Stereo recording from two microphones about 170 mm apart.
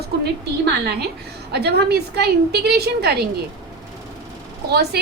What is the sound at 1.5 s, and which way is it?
A woman's voice, 70° right (ahead or behind).